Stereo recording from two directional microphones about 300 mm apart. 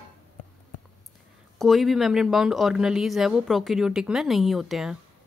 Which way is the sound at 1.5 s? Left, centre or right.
Centre.